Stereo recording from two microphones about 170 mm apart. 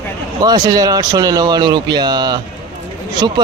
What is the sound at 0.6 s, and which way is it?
Speech, 20° right (ahead or behind).